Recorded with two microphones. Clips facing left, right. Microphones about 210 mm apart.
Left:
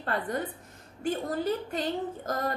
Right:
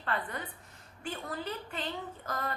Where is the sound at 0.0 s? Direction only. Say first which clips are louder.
Left 6 dB; 40° left (ahead or behind).